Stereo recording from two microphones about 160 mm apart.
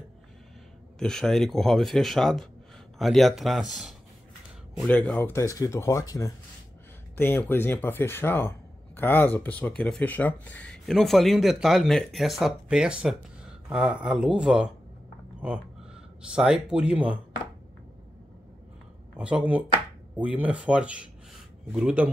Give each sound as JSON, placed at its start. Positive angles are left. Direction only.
{"t": 0.9, "sound": "speech", "side_deg": 5}
{"t": 4.7, "sound": "speech", "side_deg": 5}
{"t": 16.2, "sound": "speech", "side_deg": -5}
{"t": 19.1, "sound": "speech", "side_deg": -5}